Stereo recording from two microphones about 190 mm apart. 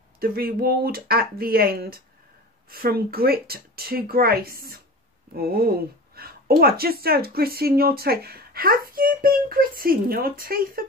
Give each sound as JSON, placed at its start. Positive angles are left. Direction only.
{"t": 0.2, "sound": "speech", "side_deg": -50}